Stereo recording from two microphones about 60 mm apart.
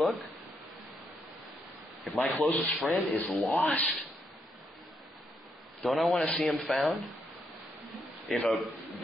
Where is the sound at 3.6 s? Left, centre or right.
Left.